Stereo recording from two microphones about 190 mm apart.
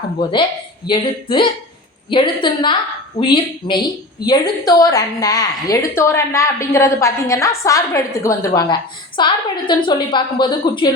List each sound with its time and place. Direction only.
0.2 s a woman's voice: 25° left (ahead or behind)